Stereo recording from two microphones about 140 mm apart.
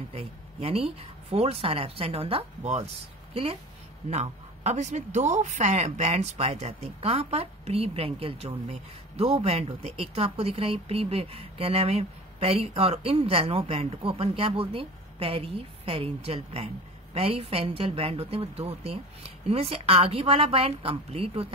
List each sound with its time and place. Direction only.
0.1 s a woman's voice: 50° right (ahead or behind)
4.1 s a woman's voice: 55° right (ahead or behind)